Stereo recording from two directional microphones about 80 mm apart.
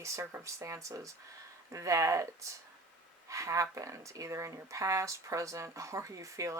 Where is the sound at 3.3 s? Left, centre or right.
Right.